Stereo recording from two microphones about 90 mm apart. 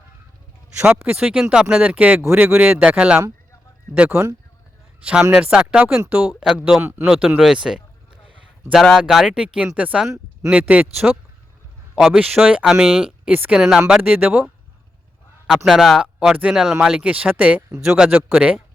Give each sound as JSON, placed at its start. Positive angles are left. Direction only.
{"t": 0.9, "sound": "speech", "side_deg": -15}
{"t": 4.1, "sound": "speech", "side_deg": -30}
{"t": 7.1, "sound": "speech", "side_deg": -15}
{"t": 14.0, "sound": "speech", "side_deg": -20}
{"t": 15.4, "sound": "speech", "side_deg": 0}